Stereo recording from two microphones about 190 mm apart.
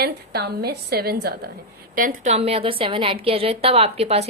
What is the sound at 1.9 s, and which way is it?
A woman's voice, 45° right (ahead or behind).